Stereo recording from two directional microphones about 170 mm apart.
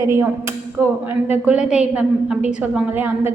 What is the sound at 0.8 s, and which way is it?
A woman's voice, 10° right (ahead or behind).